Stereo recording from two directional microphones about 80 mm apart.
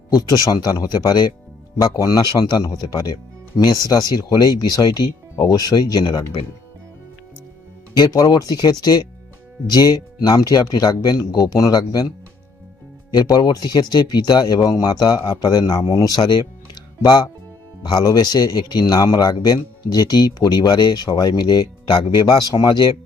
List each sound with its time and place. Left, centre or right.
0.2 s a man's voice: left
7.9 s a man's voice: left
13.1 s a man's voice: left